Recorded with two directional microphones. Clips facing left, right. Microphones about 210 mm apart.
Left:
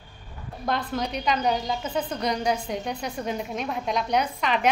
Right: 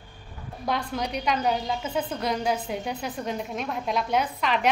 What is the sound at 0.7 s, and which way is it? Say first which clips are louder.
A woman's voice: left 1 dB; 10° right (ahead or behind).